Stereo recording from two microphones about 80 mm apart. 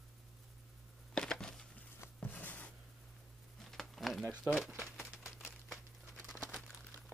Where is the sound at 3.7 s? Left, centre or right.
Centre.